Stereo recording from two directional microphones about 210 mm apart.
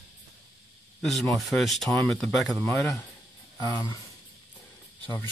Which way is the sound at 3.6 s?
20° left (ahead or behind).